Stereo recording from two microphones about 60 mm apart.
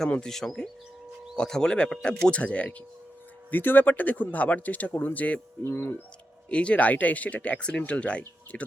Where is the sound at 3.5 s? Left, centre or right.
Left.